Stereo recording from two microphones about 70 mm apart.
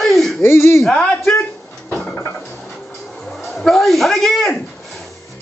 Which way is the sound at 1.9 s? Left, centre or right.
Left.